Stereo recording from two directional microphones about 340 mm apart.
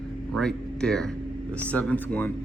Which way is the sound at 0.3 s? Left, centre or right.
Centre.